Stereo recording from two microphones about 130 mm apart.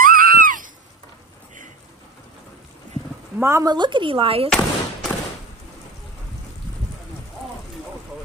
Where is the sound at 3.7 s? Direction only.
35° right (ahead or behind).